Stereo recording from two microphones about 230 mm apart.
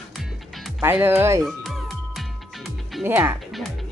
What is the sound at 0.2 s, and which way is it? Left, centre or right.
Music, centre.